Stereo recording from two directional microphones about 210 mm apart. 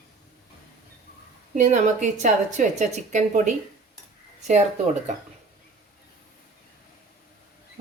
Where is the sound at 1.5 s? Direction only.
35° right (ahead or behind).